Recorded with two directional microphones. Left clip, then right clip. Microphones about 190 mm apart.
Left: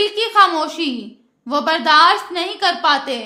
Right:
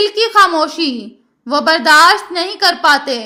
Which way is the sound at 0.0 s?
25° right (ahead or behind).